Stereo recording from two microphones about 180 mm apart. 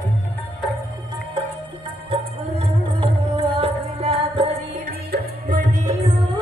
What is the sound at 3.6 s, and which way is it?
Music, 30° right (ahead or behind).